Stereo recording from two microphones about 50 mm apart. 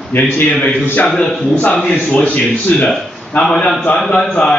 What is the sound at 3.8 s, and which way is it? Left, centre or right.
Speech, left.